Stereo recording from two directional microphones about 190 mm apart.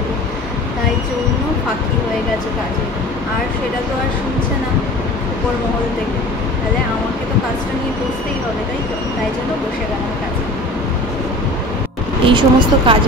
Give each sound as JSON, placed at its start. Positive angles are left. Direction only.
{"t": 12.3, "sound": "speech", "side_deg": -25}